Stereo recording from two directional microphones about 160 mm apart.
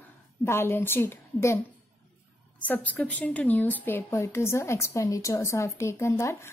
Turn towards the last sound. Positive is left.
turn(degrees=15)  # may be behind; listen again after turning